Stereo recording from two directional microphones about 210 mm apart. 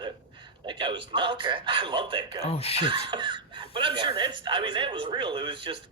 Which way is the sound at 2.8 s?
20° right (ahead or behind).